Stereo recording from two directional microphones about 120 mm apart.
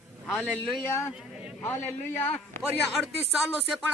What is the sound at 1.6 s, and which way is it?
Speech, 20° left (ahead or behind).